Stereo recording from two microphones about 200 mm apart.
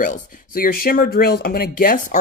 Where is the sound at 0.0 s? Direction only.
45° left (ahead or behind).